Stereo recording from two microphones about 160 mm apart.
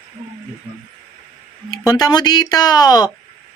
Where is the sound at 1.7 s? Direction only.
25° left (ahead or behind).